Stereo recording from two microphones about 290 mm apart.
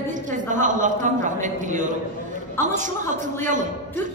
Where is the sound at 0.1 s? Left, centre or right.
Right.